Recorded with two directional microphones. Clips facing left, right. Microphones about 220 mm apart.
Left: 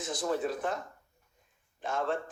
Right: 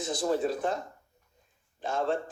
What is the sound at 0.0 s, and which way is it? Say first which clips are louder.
A man's voice: right 3 dB; 30° right (ahead or behind).